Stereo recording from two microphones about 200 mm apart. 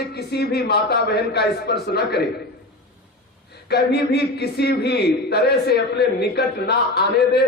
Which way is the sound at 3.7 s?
55° left (ahead or behind).